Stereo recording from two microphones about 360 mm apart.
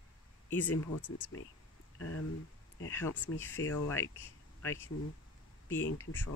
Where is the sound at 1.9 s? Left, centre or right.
Left.